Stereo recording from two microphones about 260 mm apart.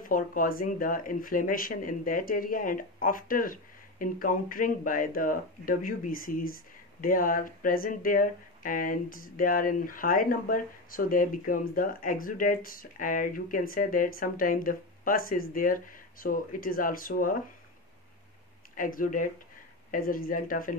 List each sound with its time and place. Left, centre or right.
0.0 s speech: left
18.8 s speech: left